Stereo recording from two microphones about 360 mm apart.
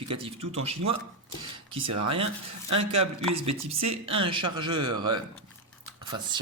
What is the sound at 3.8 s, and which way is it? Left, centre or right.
Speech, centre.